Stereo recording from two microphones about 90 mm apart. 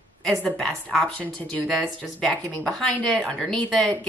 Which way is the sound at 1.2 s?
15° left (ahead or behind).